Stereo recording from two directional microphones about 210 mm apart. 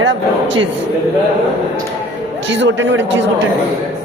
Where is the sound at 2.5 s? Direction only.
60° right (ahead or behind).